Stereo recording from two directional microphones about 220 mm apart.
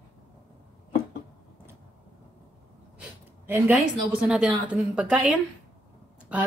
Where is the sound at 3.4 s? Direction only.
10° right (ahead or behind).